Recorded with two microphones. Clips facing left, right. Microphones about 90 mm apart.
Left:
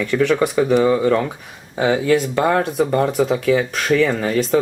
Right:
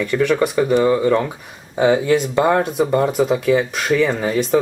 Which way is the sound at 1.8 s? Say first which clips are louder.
Right 1 dB; 20° right (ahead or behind).